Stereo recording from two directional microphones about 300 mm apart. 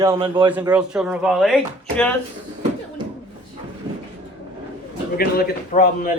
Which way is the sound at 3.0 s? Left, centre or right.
Centre.